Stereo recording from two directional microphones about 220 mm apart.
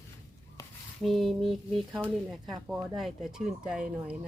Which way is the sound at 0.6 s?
15° left (ahead or behind).